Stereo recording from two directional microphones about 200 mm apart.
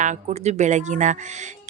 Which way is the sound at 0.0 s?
35° right (ahead or behind).